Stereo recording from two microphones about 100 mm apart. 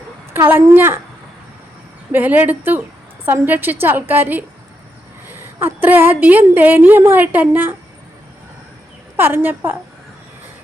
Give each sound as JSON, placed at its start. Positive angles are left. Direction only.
{"t": 0.3, "sound": "a woman's voice", "side_deg": -20}
{"t": 2.1, "sound": "a woman's voice", "side_deg": -15}
{"t": 9.1, "sound": "a woman's voice", "side_deg": -20}